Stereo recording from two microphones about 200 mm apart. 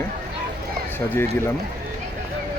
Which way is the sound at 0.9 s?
10° left (ahead or behind).